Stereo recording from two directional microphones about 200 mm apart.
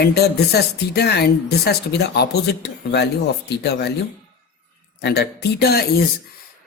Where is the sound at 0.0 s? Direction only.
55° left (ahead or behind).